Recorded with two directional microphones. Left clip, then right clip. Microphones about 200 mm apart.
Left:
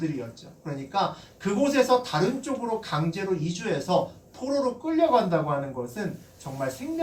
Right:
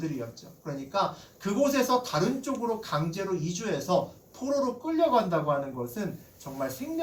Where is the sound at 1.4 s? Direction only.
25° left (ahead or behind).